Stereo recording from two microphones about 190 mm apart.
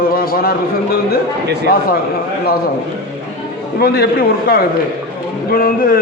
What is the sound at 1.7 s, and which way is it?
Speech, 50° left (ahead or behind).